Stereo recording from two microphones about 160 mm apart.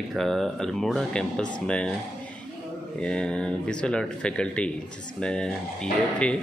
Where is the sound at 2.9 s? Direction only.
5° left (ahead or behind).